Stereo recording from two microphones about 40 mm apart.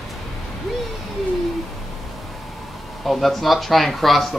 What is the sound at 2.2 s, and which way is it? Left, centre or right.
Speech, centre.